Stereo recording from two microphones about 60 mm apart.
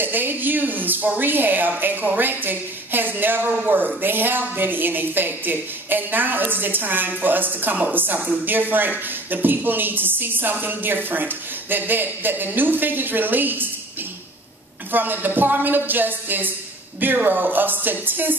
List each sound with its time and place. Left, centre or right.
0.0 s a woman's voice: right
14.9 s a woman's voice: right